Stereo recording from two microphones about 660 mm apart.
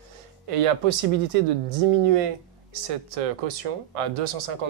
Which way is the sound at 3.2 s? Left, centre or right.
Right.